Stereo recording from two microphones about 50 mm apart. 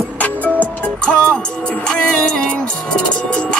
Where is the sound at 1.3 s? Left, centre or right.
Left.